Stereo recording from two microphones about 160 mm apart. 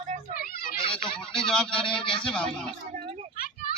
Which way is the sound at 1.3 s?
5° left (ahead or behind).